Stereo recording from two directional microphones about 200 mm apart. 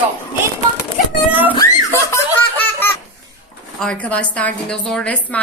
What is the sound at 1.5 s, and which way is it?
Laughter, 15° left (ahead or behind).